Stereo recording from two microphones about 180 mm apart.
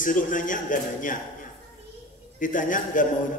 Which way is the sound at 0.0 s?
45° left (ahead or behind).